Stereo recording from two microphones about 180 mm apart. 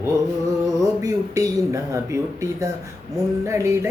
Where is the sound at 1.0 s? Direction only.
15° right (ahead or behind).